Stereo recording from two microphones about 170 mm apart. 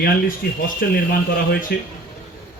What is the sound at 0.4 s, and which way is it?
A man's voice, 65° left (ahead or behind).